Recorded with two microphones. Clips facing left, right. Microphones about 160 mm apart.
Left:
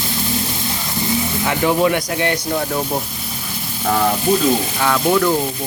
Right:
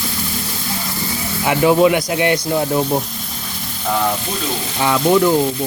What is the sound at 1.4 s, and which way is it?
Speech, 15° right (ahead or behind).